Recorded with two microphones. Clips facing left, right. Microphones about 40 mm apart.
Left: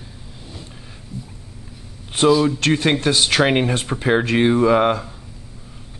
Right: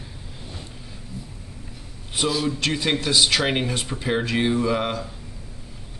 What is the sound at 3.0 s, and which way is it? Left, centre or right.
Speech, left.